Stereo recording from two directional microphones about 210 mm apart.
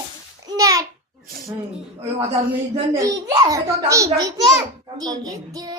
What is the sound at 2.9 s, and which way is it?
A child's voice, 15° right (ahead or behind).